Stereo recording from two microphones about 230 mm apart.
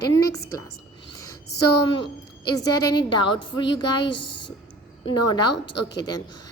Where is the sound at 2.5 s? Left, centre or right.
Centre.